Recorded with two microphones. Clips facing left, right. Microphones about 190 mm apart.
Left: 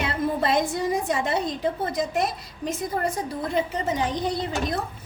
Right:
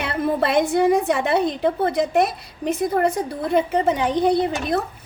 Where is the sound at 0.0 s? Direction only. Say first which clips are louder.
Right 3 dB; 65° right (ahead or behind).